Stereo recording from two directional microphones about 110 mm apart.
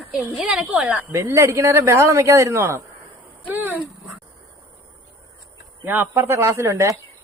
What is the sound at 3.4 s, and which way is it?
Dog, 15° right (ahead or behind).